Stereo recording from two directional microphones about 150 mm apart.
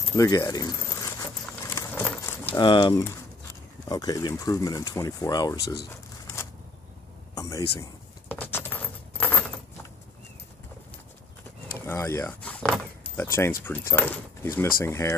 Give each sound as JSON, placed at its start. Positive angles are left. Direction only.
{"t": 0.1, "sound": "a sound", "side_deg": 20}
{"t": 2.5, "sound": "speech", "side_deg": 30}
{"t": 7.3, "sound": "speech", "side_deg": 20}
{"t": 8.3, "sound": "coin", "side_deg": 15}
{"t": 11.8, "sound": "a sound", "side_deg": 20}
{"t": 13.1, "sound": "speech", "side_deg": 15}